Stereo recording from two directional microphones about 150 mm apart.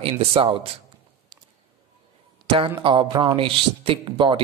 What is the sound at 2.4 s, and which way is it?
Speech, 35° right (ahead or behind).